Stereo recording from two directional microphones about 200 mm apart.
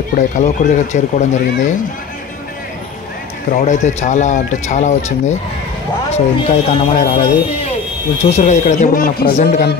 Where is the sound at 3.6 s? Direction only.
35° left (ahead or behind).